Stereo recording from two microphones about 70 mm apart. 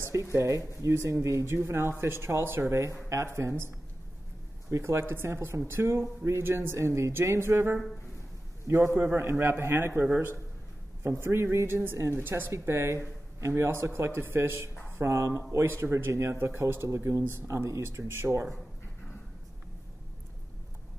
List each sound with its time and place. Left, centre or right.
0.0 s speech: right